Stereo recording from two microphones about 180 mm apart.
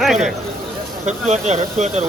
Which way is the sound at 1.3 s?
40° right (ahead or behind).